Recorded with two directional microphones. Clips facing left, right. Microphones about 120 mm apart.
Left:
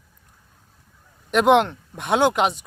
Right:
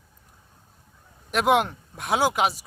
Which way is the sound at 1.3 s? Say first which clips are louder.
Left 5 dB; centre (ahead or behind).